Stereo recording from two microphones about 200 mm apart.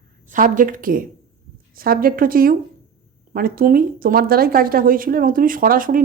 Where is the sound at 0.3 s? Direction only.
40° right (ahead or behind).